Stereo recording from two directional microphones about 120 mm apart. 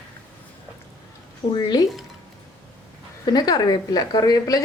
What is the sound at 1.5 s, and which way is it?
Speech, 35° left (ahead or behind).